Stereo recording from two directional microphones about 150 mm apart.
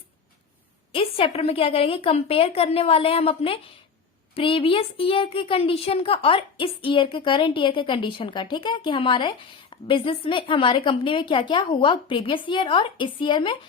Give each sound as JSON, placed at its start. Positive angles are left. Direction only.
{"t": 0.9, "sound": "a woman's voice", "side_deg": 40}